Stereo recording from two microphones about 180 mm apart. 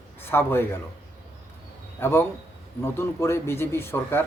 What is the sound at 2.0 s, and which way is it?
Speech, 10° left (ahead or behind).